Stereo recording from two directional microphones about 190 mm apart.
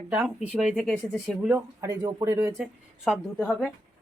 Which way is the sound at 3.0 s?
Centre (ahead or behind).